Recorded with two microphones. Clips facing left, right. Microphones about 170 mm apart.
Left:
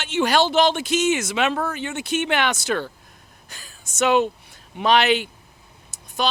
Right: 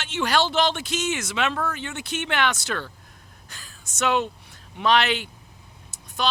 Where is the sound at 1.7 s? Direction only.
5° left (ahead or behind).